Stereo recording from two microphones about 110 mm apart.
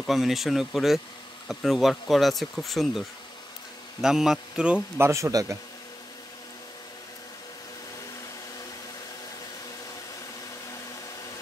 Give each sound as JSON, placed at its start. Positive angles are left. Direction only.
{"t": 0.0, "sound": "speech", "side_deg": 0}
{"t": 4.9, "sound": "speech", "side_deg": -25}